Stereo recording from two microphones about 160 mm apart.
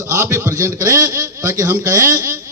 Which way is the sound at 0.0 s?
20° right (ahead or behind).